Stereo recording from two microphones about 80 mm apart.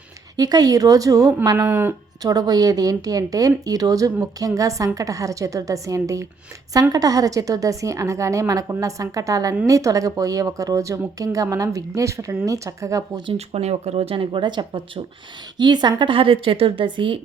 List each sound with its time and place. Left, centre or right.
0.3 s speech: right
1.5 s speech: right
2.2 s speech: right
14.2 s a woman's voice: right
15.5 s a woman's voice: right